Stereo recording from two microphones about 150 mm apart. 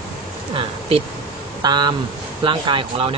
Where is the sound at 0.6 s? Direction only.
40° right (ahead or behind).